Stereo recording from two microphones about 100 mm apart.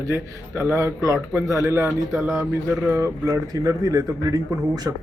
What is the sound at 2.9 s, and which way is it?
A man's voice, 30° right (ahead or behind).